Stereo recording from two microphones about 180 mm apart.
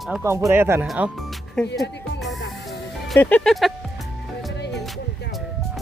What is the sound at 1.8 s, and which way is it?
Music, 70° left (ahead or behind).